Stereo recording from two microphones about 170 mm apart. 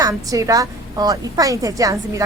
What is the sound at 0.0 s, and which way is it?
A woman's voice, 20° right (ahead or behind).